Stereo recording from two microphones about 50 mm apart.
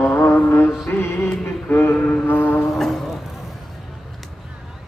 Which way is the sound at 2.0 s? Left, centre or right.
Left.